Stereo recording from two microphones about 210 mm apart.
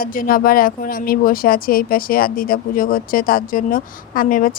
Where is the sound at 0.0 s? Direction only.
40° left (ahead or behind).